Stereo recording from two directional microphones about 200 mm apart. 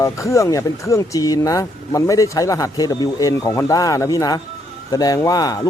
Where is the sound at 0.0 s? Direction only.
15° left (ahead or behind).